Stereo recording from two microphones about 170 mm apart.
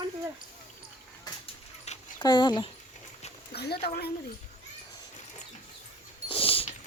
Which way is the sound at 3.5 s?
70° left (ahead or behind).